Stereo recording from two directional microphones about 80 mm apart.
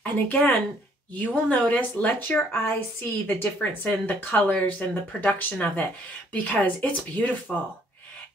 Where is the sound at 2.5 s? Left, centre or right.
Left.